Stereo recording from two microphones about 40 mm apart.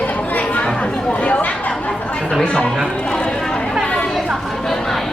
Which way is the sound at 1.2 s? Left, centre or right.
Left.